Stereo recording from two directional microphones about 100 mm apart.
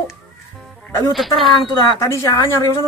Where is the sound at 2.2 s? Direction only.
30° left (ahead or behind).